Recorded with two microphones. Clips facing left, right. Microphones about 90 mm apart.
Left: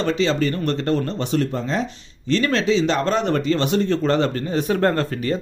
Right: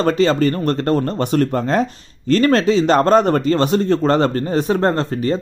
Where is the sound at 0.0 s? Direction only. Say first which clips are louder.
Right 5 dB; 45° right (ahead or behind).